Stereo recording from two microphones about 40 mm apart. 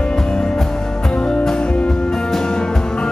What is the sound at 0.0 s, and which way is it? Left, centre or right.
Music, left.